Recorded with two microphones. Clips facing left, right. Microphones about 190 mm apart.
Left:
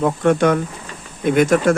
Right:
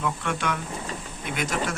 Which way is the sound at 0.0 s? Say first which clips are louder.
Left 13 dB; 45° left (ahead or behind).